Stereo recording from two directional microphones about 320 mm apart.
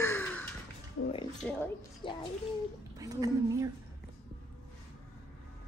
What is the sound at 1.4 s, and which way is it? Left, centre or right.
Speech, centre.